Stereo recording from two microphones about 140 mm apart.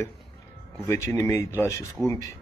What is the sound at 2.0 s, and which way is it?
Speech, centre (ahead or behind).